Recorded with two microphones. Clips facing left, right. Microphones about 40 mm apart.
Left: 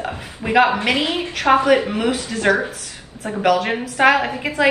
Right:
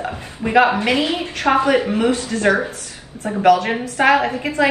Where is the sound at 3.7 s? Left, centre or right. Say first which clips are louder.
Even; centre.